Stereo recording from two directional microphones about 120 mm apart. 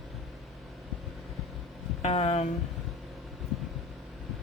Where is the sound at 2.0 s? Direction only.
50° left (ahead or behind).